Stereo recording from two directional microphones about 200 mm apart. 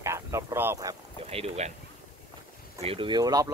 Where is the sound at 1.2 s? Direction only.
30° right (ahead or behind).